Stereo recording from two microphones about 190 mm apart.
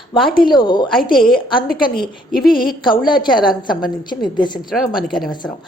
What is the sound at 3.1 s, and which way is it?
A woman's voice, 25° left (ahead or behind).